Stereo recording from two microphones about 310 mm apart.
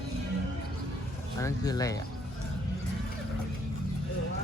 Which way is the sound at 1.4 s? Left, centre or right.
Centre.